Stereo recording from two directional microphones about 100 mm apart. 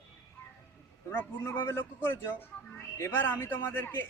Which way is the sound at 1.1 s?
25° left (ahead or behind).